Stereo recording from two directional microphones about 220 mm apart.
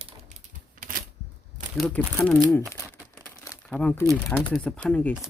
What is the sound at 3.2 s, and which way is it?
Crumpling, 15° left (ahead or behind).